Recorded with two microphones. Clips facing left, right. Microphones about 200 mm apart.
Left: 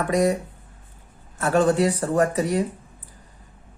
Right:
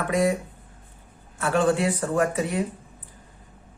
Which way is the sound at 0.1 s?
40° left (ahead or behind).